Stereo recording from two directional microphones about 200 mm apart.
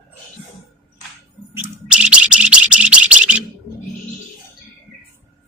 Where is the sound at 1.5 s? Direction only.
5° right (ahead or behind).